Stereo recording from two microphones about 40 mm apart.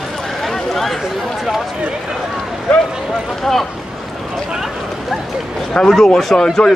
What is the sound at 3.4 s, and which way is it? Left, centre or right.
Boat, centre.